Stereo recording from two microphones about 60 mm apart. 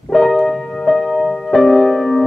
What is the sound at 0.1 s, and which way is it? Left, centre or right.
Music, centre.